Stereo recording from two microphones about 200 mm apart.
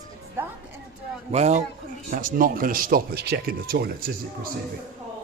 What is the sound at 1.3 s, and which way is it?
Speech, 35° right (ahead or behind).